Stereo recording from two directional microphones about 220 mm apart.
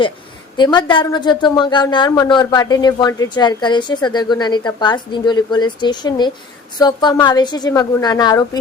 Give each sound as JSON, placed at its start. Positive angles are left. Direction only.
{"t": 0.5, "sound": "a woman's voice", "side_deg": 20}